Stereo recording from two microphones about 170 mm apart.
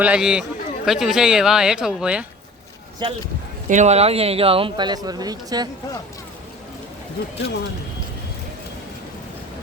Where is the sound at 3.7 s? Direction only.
40° right (ahead or behind); by 5.7 s 25° right (ahead or behind).